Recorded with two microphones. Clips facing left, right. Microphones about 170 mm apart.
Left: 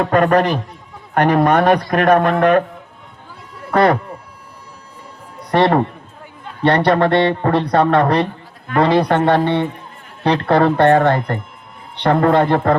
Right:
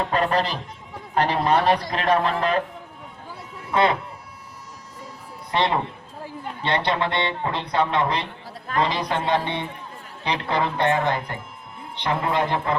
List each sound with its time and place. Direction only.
0.0 s speech: 65° left (ahead or behind)
3.7 s speech: 65° left (ahead or behind)
5.5 s speech: 65° left (ahead or behind)